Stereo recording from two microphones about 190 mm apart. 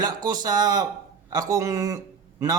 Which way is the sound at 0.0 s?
20° right (ahead or behind).